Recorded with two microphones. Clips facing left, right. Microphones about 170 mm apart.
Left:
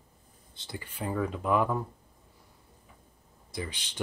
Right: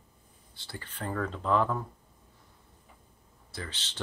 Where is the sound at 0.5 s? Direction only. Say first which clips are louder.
Left 2 dB; 15° left (ahead or behind).